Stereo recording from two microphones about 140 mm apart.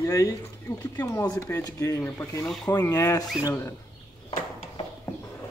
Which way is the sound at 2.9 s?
25° left (ahead or behind).